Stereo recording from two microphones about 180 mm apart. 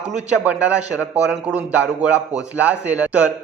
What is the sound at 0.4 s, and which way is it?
A man's voice, 5° right (ahead or behind).